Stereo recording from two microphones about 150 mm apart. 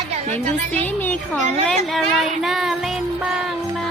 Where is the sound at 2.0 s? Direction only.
Centre (ahead or behind).